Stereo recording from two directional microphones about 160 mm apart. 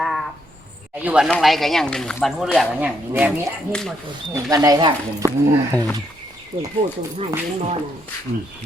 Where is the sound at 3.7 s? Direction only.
5° left (ahead or behind).